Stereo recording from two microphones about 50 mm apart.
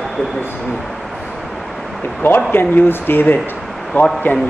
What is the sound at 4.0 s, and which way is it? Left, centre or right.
Speech, left.